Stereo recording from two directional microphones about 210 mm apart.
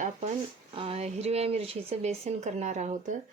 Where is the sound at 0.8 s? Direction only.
30° right (ahead or behind).